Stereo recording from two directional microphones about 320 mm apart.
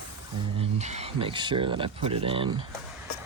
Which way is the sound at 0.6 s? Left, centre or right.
Right.